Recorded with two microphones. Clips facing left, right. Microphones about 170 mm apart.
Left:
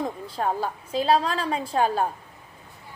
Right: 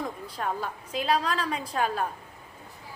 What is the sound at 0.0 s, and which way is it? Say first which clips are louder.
A woman's voice: left 5 dB; 30° left (ahead or behind).